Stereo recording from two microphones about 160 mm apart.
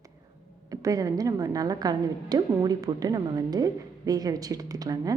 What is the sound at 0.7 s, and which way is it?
A woman's voice, 20° right (ahead or behind).